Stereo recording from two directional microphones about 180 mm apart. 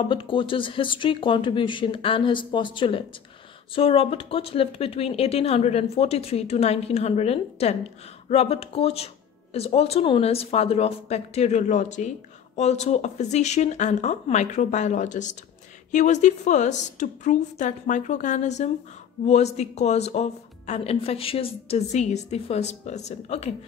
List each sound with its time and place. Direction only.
0.1 s speech: 30° left (ahead or behind)